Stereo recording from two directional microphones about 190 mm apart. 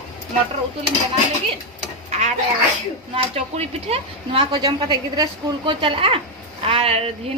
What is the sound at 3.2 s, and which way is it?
Speech, 30° right (ahead or behind).